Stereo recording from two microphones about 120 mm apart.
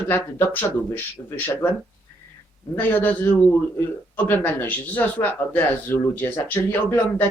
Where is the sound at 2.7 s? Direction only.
15° left (ahead or behind).